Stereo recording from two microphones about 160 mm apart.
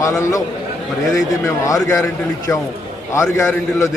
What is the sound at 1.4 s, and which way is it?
A man's voice, 20° left (ahead or behind).